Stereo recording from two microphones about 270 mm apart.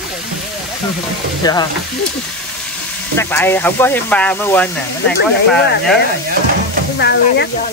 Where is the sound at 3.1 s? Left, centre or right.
Centre.